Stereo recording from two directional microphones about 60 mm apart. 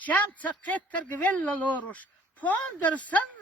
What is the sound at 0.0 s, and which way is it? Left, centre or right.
Speech, left.